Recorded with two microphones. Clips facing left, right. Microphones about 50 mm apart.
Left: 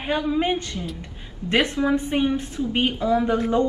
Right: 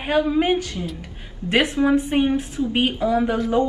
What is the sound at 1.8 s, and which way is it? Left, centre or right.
Speech, centre.